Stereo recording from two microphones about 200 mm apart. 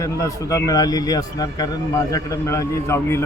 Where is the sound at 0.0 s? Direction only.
15° left (ahead or behind).